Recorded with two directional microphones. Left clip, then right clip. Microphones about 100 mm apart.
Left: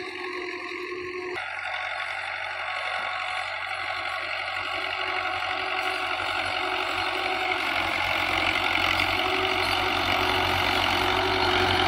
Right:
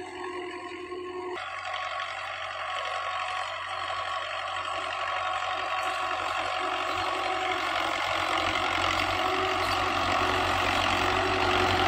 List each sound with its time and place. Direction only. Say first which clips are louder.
5.8 s vehicle: left 2 dB; 40° right (ahead or behind)